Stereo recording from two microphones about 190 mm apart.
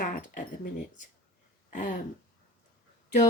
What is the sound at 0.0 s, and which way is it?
Speech, 45° left (ahead or behind).